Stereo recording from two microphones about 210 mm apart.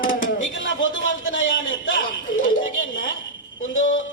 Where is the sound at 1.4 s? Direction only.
65° left (ahead or behind).